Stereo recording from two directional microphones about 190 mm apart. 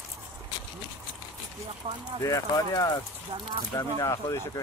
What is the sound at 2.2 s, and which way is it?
Speech, 15° left (ahead or behind).